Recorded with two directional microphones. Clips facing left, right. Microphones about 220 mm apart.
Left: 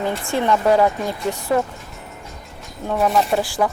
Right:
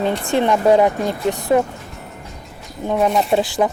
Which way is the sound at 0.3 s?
20° right (ahead or behind).